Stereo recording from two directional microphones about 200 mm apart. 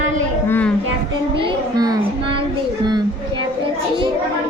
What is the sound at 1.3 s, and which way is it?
Speech, 20° right (ahead or behind).